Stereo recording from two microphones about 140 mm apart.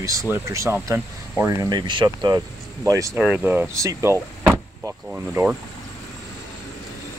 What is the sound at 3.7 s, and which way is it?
Speech, 20° right (ahead or behind).